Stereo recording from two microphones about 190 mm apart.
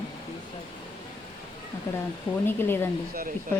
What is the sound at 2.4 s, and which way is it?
Speech, 10° left (ahead or behind).